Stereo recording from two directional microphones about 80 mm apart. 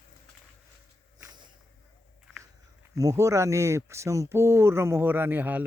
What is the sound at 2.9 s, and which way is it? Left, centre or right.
Speech, right.